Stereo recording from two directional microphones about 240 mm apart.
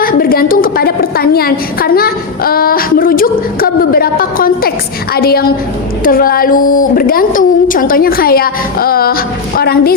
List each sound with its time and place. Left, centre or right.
0.0 s a woman's voice: left